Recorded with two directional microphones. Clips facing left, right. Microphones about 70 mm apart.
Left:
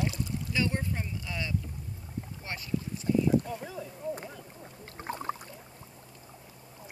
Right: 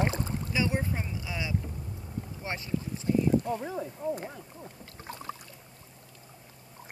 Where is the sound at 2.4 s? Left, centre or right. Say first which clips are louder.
Right 2 dB; right.